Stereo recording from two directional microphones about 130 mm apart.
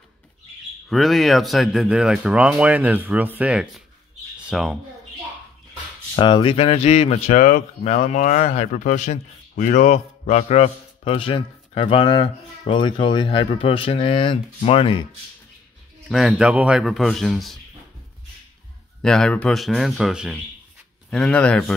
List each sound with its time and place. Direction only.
0.8 s speech: centre (ahead or behind)
6.1 s speech: 40° left (ahead or behind)
16.1 s speech: 5° right (ahead or behind)
19.0 s speech: 5° left (ahead or behind)
21.1 s speech: 5° left (ahead or behind)